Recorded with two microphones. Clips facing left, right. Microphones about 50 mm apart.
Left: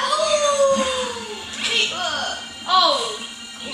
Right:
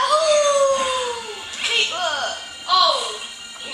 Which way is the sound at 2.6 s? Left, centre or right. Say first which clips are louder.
Even; centre.